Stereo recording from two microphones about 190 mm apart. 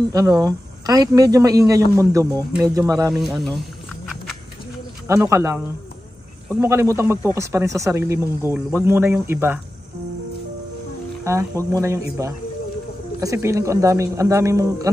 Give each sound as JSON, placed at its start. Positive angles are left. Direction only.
{"t": 0.1, "sound": "a woman's voice", "side_deg": -20}
{"t": 3.1, "sound": "speech", "side_deg": 0}
{"t": 3.5, "sound": "a sound", "side_deg": 0}
{"t": 5.0, "sound": "speech", "side_deg": -15}
{"t": 6.6, "sound": "speech", "side_deg": -15}
{"t": 11.2, "sound": "speech", "side_deg": -15}